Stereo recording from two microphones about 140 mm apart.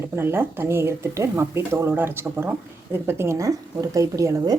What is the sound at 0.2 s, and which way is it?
Speech, 15° right (ahead or behind).